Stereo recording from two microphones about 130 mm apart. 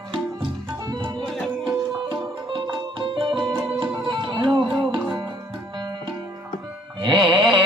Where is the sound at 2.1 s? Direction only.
35° right (ahead or behind).